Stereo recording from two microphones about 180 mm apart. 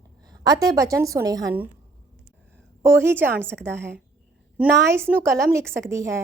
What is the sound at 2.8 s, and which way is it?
A woman's voice, 15° right (ahead or behind).